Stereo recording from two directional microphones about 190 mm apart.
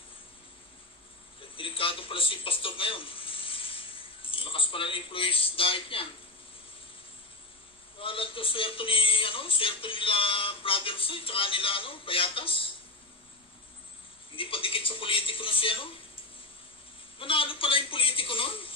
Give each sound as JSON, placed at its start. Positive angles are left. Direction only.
{"t": 1.6, "sound": "a man's voice", "side_deg": 30}
{"t": 8.0, "sound": "speech", "side_deg": 30}
{"t": 14.3, "sound": "speech", "side_deg": 30}
{"t": 17.2, "sound": "speech", "side_deg": 30}